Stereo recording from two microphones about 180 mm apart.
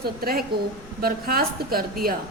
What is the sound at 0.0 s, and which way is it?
A woman's voice, 55° right (ahead or behind).